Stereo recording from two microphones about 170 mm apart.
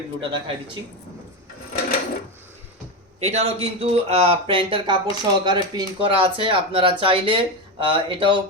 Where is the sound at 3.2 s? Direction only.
40° right (ahead or behind).